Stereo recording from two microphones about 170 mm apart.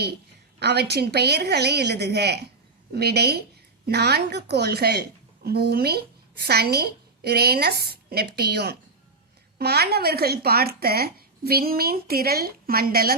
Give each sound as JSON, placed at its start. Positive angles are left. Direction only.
{"t": 0.6, "sound": "a woman's voice", "side_deg": -75}